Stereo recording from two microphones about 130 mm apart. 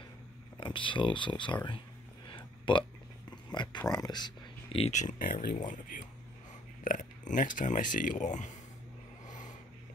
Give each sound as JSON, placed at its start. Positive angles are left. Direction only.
{"t": 0.6, "sound": "speech", "side_deg": 40}
{"t": 2.2, "sound": "a sound", "side_deg": 40}
{"t": 3.4, "sound": "speech", "side_deg": 35}
{"t": 4.7, "sound": "speech", "side_deg": 50}
{"t": 5.0, "sound": "speech", "side_deg": 80}